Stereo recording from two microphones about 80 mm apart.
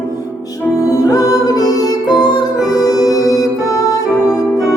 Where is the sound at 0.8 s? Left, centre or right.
Left.